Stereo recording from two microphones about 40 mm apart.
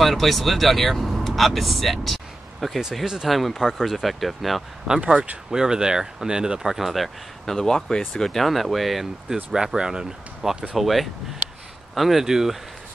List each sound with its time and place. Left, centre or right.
0.0 s speech: centre
5.0 s speech: right
5.5 s speech: centre
9.3 s speech: centre
10.7 s speech: centre